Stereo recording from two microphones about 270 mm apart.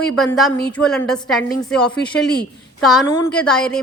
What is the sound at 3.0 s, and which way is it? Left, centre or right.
Speech, centre.